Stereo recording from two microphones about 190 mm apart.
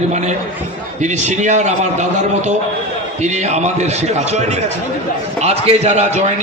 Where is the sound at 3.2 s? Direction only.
35° right (ahead or behind).